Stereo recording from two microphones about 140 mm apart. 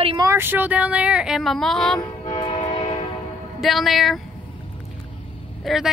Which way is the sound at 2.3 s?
35° left (ahead or behind).